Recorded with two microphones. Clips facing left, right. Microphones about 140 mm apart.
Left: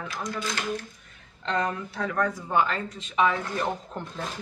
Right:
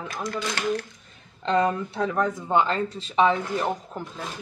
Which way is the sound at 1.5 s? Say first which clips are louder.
Right 6 dB; 25° right (ahead or behind).